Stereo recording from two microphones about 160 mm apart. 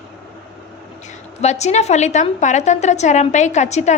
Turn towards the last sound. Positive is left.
turn(degrees=45)  # may be behind; listen again after turning